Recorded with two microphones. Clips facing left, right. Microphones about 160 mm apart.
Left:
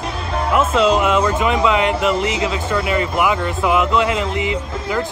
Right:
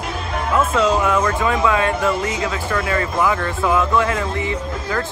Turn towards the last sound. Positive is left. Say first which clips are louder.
# left 2 dB
turn(degrees=15)  # may be behind; listen again after turning